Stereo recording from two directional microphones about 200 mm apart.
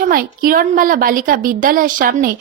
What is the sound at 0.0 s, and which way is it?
A woman's voice, 45° right (ahead or behind).